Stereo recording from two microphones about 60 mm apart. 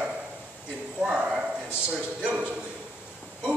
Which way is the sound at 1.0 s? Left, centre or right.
Centre.